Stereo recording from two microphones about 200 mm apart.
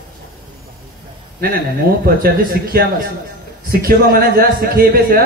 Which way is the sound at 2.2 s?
50° right (ahead or behind).